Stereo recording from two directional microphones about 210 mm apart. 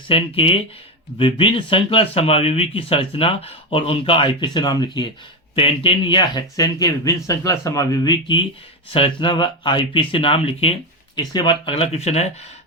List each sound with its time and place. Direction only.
0.1 s speech: 25° left (ahead or behind)